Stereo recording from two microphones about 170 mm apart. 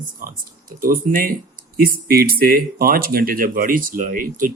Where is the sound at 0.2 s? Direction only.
55° right (ahead or behind).